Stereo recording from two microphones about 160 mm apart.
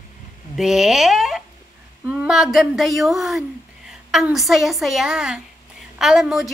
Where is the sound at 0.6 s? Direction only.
5° right (ahead or behind).